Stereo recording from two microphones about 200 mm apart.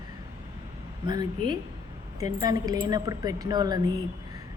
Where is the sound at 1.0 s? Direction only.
20° right (ahead or behind).